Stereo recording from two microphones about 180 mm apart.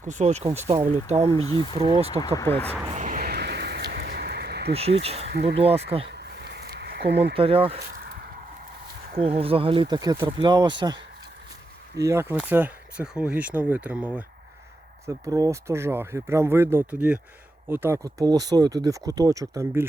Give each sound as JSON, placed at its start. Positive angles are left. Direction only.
{"t": 0.1, "sound": "speech", "side_deg": -40}
{"t": 1.3, "sound": "speech", "side_deg": 20}
{"t": 1.7, "sound": "speech", "side_deg": -30}
{"t": 2.2, "sound": "speech", "side_deg": 15}
{"t": 2.9, "sound": "a sound", "side_deg": -45}
{"t": 4.7, "sound": "speech", "side_deg": -35}
{"t": 5.3, "sound": "speech", "side_deg": -60}
{"t": 5.5, "sound": "speech", "side_deg": -35}
{"t": 6.1, "sound": "a sound", "side_deg": -65}
{"t": 7.3, "sound": "speech", "side_deg": -30}
{"t": 7.8, "sound": "a sound", "side_deg": -60}
{"t": 9.4, "sound": "speech", "side_deg": -30}
{"t": 12.0, "sound": "speech", "side_deg": -15}
{"t": 15.0, "sound": "speech", "side_deg": -20}